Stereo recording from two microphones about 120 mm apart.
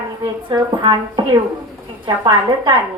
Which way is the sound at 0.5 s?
40° right (ahead or behind).